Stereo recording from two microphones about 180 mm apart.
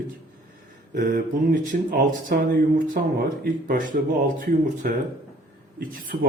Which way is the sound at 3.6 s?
50° right (ahead or behind).